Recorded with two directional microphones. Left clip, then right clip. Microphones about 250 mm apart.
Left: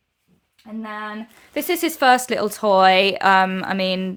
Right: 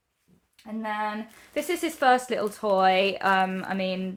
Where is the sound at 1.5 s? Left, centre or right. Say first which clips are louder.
Left 6 dB; left.